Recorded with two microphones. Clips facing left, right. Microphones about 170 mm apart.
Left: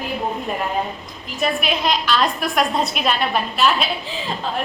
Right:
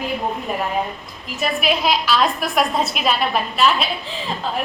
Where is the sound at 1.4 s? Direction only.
Centre (ahead or behind).